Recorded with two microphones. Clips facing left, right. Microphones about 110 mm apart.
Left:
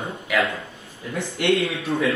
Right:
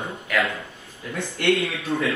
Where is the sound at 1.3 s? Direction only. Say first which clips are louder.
Left 1 dB; 25° left (ahead or behind).